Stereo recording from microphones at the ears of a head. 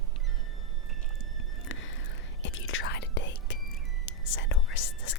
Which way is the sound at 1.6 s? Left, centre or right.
Left.